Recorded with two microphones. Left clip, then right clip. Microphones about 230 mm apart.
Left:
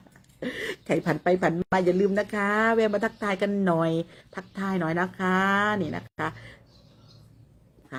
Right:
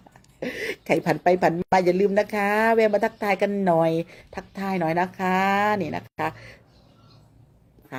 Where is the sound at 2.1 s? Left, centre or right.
Right.